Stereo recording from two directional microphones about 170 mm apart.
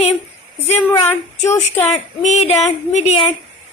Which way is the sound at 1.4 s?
40° left (ahead or behind).